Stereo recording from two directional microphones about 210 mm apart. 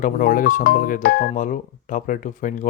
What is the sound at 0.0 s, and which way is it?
A man's voice, 40° left (ahead or behind).